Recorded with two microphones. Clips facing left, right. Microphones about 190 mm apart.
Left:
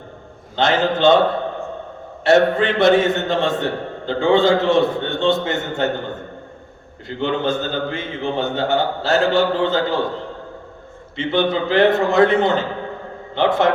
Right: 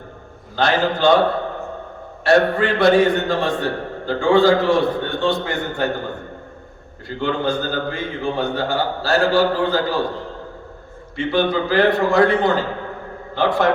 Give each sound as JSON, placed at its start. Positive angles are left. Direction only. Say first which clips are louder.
{"t": 0.5, "sound": "a man's voice", "louder": "left 1 dB", "side_deg": 25}
{"t": 2.2, "sound": "a man's voice", "louder": "left 1 dB", "side_deg": 20}
{"t": 7.2, "sound": "a man's voice", "louder": "left 1 dB", "side_deg": 20}
{"t": 11.2, "sound": "a man's voice", "louder": "even", "side_deg": 20}